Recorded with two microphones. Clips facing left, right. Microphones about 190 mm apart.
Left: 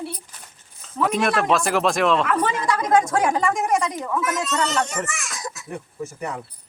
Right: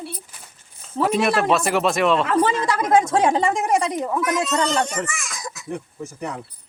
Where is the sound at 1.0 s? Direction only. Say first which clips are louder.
Right 1 dB; 5° right (ahead or behind).